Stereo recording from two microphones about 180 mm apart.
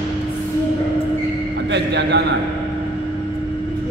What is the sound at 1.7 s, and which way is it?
Speech, 75° right (ahead or behind).